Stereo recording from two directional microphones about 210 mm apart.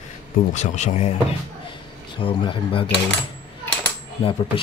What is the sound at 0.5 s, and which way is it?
Speech, 35° left (ahead or behind).